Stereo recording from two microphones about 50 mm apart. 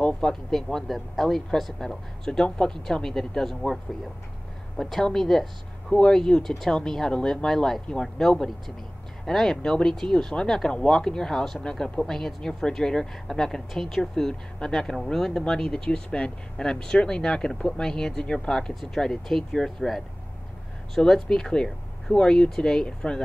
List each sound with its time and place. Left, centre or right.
0.0 s a woman's voice: centre